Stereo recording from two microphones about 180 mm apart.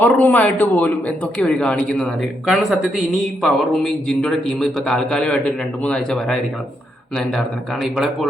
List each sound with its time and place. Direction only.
0.0 s a man's voice: 10° left (ahead or behind)
7.8 s a man's voice: centre (ahead or behind)